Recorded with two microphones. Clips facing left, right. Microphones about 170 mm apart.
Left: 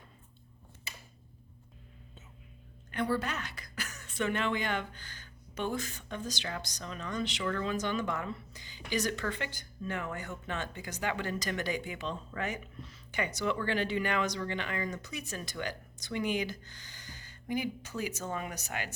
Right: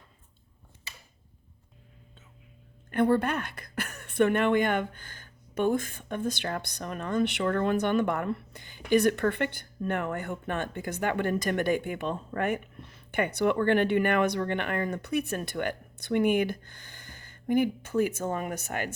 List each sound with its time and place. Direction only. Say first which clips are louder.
2.9 s a woman's voice: right 8 dB; 55° right (ahead or behind)